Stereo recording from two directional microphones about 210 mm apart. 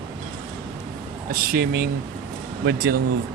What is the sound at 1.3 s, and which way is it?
Speech, 45° right (ahead or behind).